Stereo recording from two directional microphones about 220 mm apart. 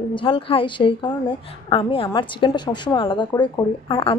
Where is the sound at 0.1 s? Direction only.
25° left (ahead or behind).